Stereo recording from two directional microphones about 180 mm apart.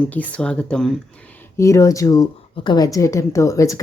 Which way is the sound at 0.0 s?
10° left (ahead or behind).